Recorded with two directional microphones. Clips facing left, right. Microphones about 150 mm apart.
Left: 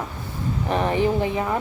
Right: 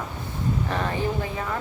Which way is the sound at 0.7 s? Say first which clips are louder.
Left 10 dB; 20° left (ahead or behind).